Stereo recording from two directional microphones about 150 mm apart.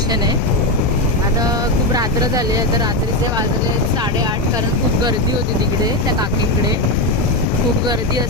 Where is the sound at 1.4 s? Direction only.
25° right (ahead or behind).